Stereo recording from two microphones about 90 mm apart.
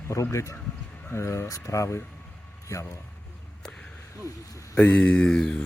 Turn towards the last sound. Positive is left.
turn(degrees=5)  # may be behind; listen again after turning